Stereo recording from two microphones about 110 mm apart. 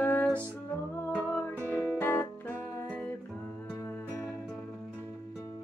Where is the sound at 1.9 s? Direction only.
20° left (ahead or behind).